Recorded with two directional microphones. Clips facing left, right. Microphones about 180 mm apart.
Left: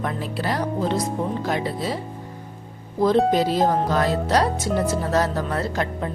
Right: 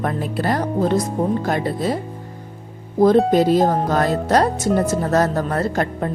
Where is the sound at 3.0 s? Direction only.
50° right (ahead or behind).